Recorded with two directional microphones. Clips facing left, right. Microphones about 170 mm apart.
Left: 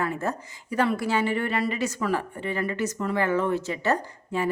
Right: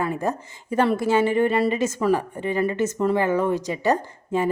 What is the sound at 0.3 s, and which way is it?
A woman's voice, 25° right (ahead or behind).